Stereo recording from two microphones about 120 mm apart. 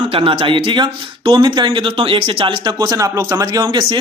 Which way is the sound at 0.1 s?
50° right (ahead or behind).